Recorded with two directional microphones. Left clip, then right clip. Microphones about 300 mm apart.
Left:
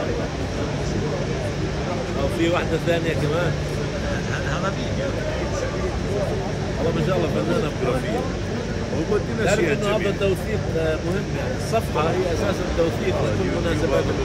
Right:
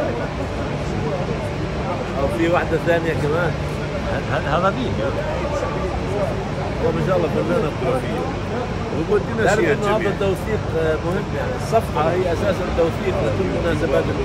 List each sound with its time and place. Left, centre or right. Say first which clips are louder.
2.4 s speech: right 3 dB; centre